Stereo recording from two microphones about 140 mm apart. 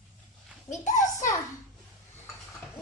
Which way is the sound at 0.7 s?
60° left (ahead or behind).